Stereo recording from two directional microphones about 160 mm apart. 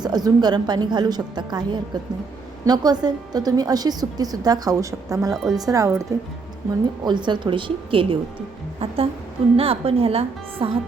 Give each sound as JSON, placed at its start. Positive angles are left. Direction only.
{"t": 0.0, "sound": "a woman's voice", "side_deg": -25}
{"t": 5.3, "sound": "speech", "side_deg": 0}
{"t": 5.6, "sound": "a woman's voice", "side_deg": -20}